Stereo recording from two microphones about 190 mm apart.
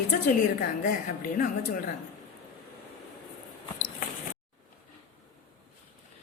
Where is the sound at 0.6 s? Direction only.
45° left (ahead or behind).